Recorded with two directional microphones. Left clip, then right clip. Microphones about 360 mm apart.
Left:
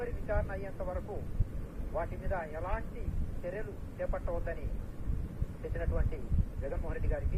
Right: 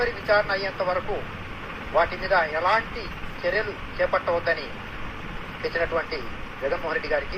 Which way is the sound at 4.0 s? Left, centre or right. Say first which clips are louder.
Right 15 dB; centre.